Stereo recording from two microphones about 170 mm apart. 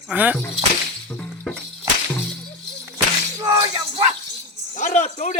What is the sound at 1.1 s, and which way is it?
Music, 5° left (ahead or behind).